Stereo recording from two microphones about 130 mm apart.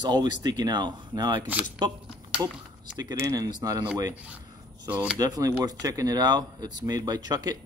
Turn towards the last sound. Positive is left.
turn(degrees=-30)  # may be behind; listen again after turning